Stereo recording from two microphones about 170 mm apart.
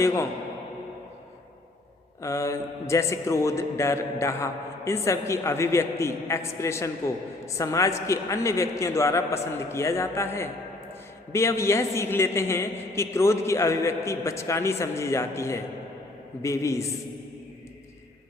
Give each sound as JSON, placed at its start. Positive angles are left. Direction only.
{"t": 0.0, "sound": "a man's voice", "side_deg": 15}
{"t": 2.2, "sound": "a man's voice", "side_deg": 20}